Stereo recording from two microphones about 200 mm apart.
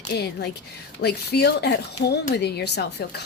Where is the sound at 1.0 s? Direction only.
55° left (ahead or behind).